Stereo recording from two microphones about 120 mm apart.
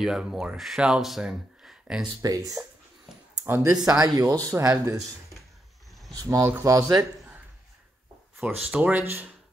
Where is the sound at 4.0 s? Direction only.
30° right (ahead or behind).